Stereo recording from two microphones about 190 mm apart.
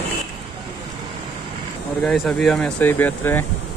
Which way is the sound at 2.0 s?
5° left (ahead or behind).